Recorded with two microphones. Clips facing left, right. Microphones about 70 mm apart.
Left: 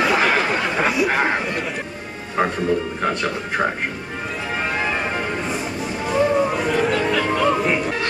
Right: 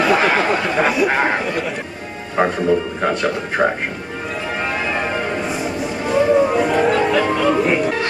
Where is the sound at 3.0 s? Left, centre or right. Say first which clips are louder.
Right 3 dB; centre.